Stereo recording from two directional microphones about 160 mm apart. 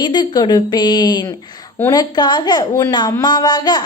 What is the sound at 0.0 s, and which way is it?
A woman's voice, 25° left (ahead or behind).